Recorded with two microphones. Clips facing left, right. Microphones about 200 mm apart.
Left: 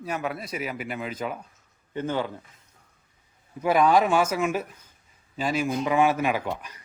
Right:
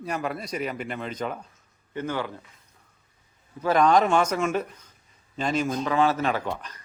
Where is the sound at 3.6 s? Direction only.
10° left (ahead or behind).